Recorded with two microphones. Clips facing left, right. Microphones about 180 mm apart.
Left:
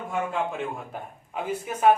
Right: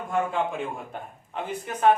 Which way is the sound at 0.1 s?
Centre (ahead or behind).